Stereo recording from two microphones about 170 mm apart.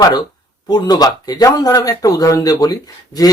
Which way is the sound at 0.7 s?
25° left (ahead or behind).